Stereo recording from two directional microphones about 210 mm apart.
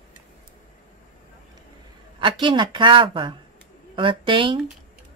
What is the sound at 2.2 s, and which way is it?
Speech, 25° right (ahead or behind).